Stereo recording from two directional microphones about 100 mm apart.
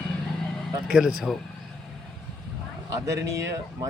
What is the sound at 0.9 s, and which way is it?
Speech, 5° right (ahead or behind).